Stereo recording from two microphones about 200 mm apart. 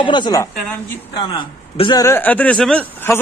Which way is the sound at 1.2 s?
25° left (ahead or behind).